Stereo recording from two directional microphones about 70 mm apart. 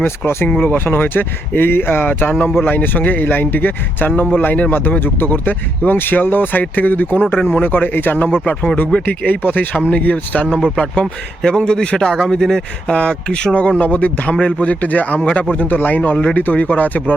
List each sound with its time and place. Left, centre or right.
0.4 s a man's voice: left